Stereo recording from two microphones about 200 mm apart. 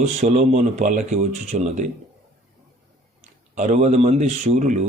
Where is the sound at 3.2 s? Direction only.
35° right (ahead or behind).